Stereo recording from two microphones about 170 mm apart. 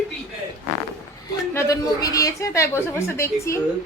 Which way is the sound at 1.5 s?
15° left (ahead or behind).